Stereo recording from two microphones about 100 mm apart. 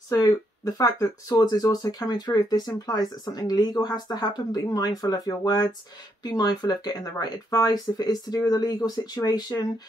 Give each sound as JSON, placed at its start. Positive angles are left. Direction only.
{"t": 0.1, "sound": "speech", "side_deg": 35}